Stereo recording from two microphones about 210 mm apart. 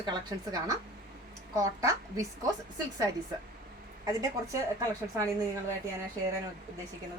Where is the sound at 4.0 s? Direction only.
15° right (ahead or behind).